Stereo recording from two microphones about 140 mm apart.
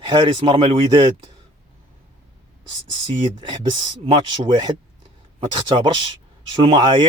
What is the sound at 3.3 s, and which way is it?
Speech, 35° right (ahead or behind).